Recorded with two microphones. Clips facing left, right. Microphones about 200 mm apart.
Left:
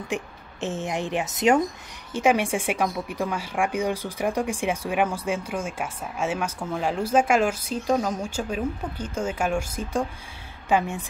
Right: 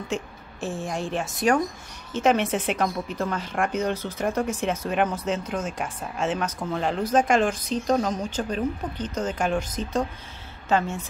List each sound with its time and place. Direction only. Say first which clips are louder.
0.1 s a woman's voice: left 1 dB; 20° left (ahead or behind)